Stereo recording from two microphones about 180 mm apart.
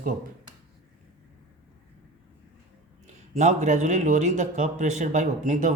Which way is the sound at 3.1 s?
40° right (ahead or behind).